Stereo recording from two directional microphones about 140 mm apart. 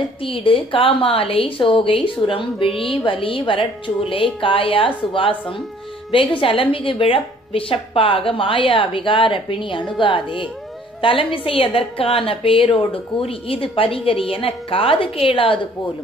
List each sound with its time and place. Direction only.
0.2 s a woman's voice: 40° left (ahead or behind)